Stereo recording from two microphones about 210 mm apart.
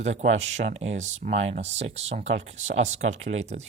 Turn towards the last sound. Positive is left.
turn(degrees=-30)  # may be behind; listen again after turning